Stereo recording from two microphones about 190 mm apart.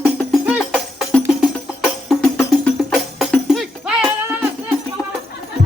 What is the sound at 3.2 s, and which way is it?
Music, centre (ahead or behind).